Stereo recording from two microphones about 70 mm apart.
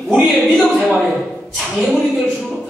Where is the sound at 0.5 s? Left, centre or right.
Centre.